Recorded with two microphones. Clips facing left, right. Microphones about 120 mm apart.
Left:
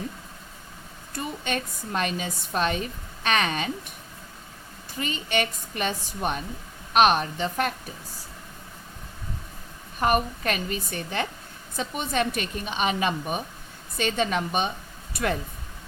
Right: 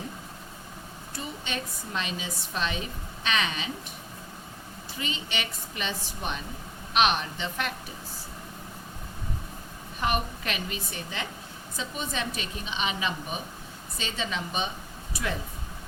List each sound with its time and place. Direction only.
1.1 s a woman's voice: 50° left (ahead or behind)
4.9 s a woman's voice: 50° left (ahead or behind)
10.0 s a woman's voice: 45° left (ahead or behind)